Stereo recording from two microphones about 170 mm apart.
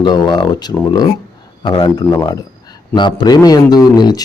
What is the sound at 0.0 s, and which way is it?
A man's voice, 25° left (ahead or behind).